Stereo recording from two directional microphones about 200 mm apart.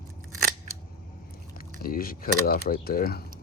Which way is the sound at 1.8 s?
45° left (ahead or behind).